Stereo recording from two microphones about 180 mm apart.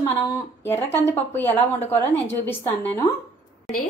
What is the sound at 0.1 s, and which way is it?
Speech, 10° left (ahead or behind).